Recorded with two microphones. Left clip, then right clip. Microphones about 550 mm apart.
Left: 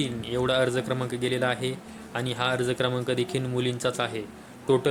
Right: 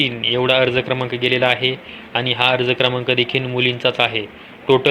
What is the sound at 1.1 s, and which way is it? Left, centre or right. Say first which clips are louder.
Speech: right 12 dB; left.